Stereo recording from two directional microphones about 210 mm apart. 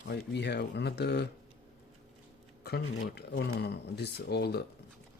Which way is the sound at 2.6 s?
50° left (ahead or behind).